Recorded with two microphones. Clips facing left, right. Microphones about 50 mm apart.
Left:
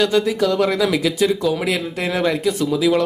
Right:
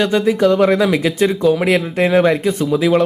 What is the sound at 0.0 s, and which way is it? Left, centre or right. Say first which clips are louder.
Speech: right 3 dB; right.